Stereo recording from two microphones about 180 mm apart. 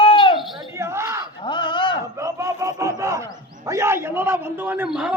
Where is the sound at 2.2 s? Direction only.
15° right (ahead or behind).